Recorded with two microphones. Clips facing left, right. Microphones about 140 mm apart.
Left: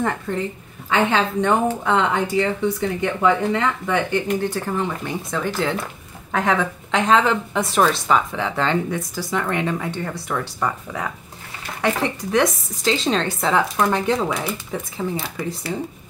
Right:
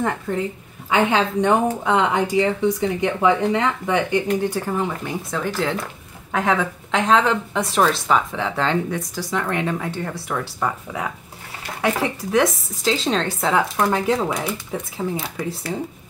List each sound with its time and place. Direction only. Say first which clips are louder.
0.3 s a woman's voice: right 1 dB; 5° right (ahead or behind)